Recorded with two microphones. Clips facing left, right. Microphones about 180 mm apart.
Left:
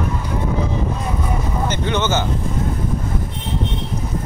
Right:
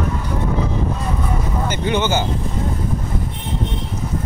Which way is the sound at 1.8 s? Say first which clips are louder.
Right 2 dB; 10° right (ahead or behind).